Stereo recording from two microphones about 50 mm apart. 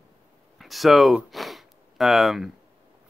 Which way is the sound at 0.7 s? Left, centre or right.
Centre.